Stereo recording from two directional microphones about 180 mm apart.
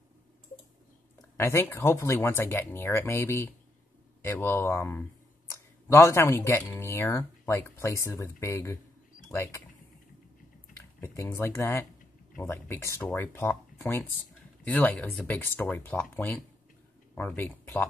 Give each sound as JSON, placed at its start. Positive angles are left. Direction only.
{"t": 1.3, "sound": "speech", "side_deg": 15}
{"t": 11.0, "sound": "speech", "side_deg": 15}